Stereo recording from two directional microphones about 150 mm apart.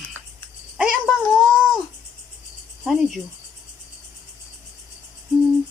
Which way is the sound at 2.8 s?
5° right (ahead or behind).